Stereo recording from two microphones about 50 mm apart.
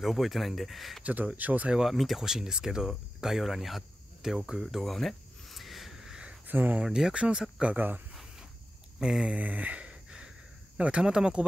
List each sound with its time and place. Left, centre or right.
0.0 s speech: centre
1.0 s speech: right
1.9 s speech: centre
4.6 s cricket: centre
6.4 s speech: right
6.8 s speech: centre
7.6 s speech: right
9.0 s speech: centre
9.3 s a sound: right
10.8 s speech: centre